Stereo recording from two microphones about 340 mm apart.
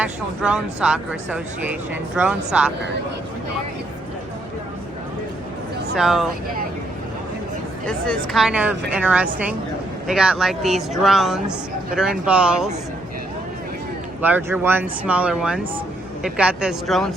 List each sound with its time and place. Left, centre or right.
0.0 s speech: centre
5.9 s speech: centre
7.9 s speech: centre
14.2 s speech: centre